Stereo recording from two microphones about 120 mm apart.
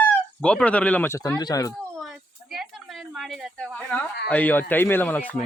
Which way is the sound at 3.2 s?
Centre (ahead or behind).